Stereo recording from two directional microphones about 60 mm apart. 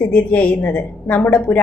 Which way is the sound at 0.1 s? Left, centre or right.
Left.